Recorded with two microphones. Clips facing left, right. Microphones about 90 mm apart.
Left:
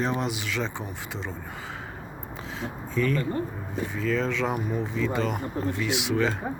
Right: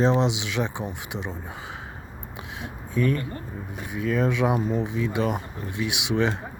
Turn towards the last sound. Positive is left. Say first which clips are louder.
# even
turn(degrees=-20)  # may be behind; listen again after turning